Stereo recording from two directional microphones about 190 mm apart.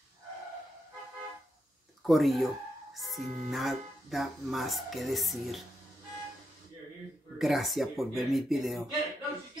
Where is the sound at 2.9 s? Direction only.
Centre (ahead or behind).